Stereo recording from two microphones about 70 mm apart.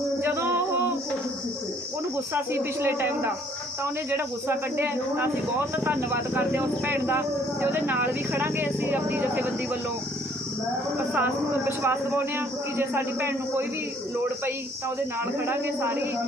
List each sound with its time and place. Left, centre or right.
0.2 s music: right
2.3 s speech: right
10.9 s speech: right